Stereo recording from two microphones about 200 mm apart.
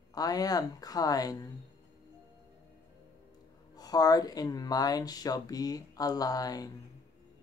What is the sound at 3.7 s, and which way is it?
Speech, 20° left (ahead or behind).